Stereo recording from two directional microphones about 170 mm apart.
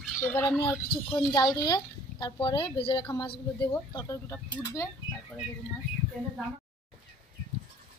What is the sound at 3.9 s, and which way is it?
Speech, 20° left (ahead or behind).